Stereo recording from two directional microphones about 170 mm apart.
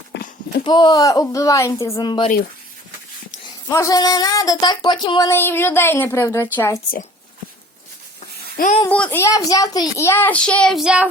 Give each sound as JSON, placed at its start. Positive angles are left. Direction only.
{"t": 0.1, "sound": "horse", "side_deg": 85}
{"t": 0.6, "sound": "speech", "side_deg": 25}
{"t": 3.7, "sound": "speech", "side_deg": 20}
{"t": 5.3, "sound": "speech", "side_deg": 15}
{"t": 8.9, "sound": "speech", "side_deg": 10}